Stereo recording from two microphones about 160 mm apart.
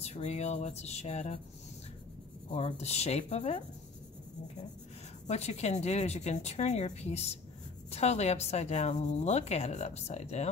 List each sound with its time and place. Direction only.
0.0 s speech: 45° left (ahead or behind)
2.5 s speech: 40° left (ahead or behind)
5.2 s speech: 45° left (ahead or behind)